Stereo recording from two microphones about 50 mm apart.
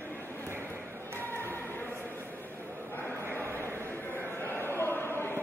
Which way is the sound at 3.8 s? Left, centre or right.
Left.